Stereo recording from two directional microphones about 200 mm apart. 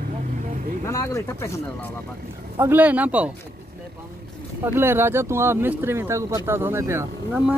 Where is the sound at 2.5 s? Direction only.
10° right (ahead or behind).